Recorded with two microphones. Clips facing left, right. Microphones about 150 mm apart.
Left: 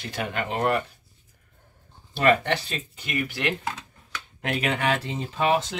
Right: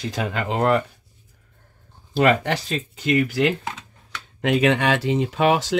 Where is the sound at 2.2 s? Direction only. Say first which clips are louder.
Right 3 dB; 90° right.